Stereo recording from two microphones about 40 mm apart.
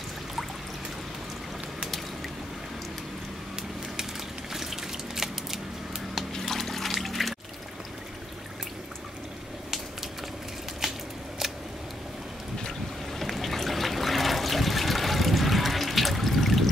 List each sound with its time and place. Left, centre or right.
4.5 s a sound: centre
6.6 s trickle: centre
13.2 s trickle: centre